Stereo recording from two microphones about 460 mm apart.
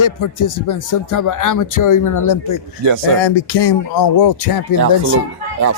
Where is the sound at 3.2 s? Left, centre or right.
Left.